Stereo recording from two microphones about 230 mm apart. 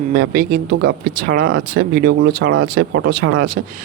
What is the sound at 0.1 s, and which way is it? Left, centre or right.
Speech, right.